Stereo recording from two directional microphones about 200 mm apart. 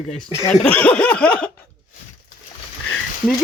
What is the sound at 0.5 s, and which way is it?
Chuckle, 5° left (ahead or behind).